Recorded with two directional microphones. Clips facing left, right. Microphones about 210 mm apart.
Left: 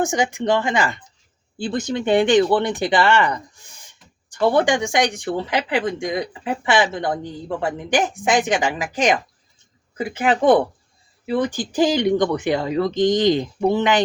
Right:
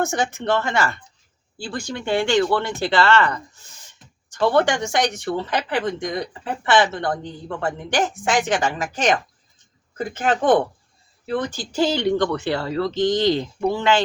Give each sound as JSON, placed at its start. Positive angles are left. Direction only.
{"t": 0.0, "sound": "speech", "side_deg": 15}